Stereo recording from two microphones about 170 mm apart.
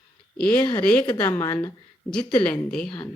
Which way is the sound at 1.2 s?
20° left (ahead or behind).